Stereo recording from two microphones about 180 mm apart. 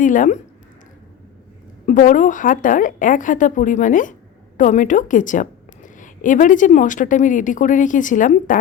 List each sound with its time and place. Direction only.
0.0 s a woman's voice: 45° left (ahead or behind)
1.9 s a woman's voice: 45° left (ahead or behind)